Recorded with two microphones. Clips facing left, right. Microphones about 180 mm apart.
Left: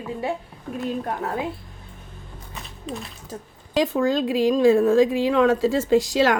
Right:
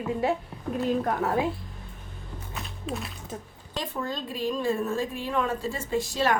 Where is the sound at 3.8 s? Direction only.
90° left.